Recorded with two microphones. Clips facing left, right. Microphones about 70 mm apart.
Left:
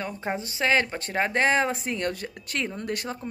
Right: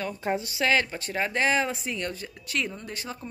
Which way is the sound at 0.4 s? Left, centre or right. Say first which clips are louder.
Left 3 dB; left.